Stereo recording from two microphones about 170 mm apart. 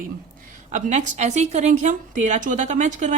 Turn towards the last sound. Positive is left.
turn(degrees=-45)  # may be behind; listen again after turning